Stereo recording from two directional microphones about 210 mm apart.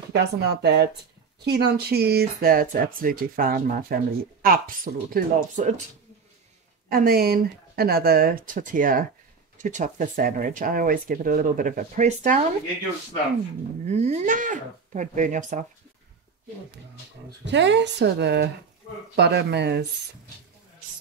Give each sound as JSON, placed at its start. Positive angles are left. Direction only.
{"t": 0.1, "sound": "speech", "side_deg": -50}
{"t": 6.9, "sound": "speech", "side_deg": -45}
{"t": 13.8, "sound": "speech", "side_deg": -30}
{"t": 17.5, "sound": "speech", "side_deg": -55}